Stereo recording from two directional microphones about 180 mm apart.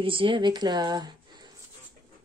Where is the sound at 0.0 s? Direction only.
30° right (ahead or behind).